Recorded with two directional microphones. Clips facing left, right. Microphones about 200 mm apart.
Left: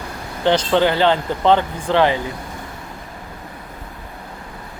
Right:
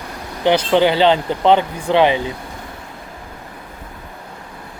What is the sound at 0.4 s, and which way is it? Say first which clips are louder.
Speech: right 2 dB; 10° right (ahead or behind).